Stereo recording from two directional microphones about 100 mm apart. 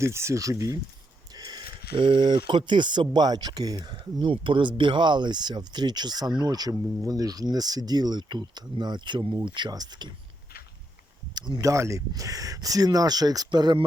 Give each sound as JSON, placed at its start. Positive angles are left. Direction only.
{"t": 0.0, "sound": "speech", "side_deg": -30}
{"t": 1.4, "sound": "speech", "side_deg": -45}
{"t": 11.3, "sound": "speech", "side_deg": -50}
{"t": 11.6, "sound": "speech", "side_deg": -30}